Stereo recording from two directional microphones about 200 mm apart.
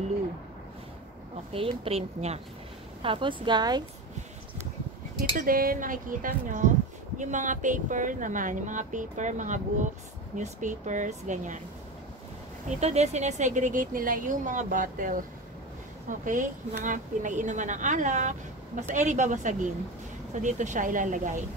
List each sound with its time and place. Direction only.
1.5 s a woman's voice: 30° right (ahead or behind)
5.3 s speech: 45° right (ahead or behind)
12.6 s speech: 35° right (ahead or behind)